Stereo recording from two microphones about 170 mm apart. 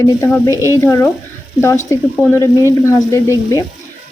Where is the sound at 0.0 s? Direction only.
20° left (ahead or behind).